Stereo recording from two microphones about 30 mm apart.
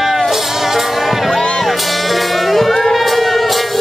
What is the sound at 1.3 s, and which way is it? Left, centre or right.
Music, centre.